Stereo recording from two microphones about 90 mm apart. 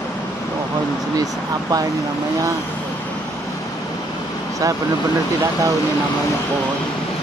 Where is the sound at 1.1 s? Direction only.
45° right (ahead or behind).